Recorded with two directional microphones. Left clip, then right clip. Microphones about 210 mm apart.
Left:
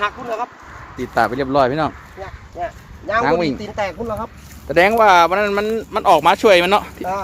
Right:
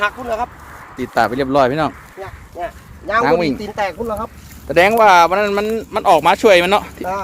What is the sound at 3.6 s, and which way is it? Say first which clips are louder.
Speech: right 2 dB; 30° right (ahead or behind).